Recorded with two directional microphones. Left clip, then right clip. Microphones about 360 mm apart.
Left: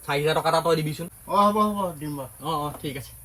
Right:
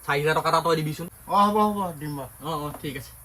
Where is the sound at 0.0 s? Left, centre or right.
Centre.